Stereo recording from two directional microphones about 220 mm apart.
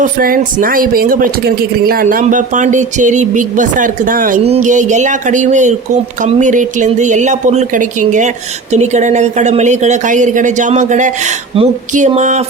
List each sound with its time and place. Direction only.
0.2 s speech: 40° right (ahead or behind)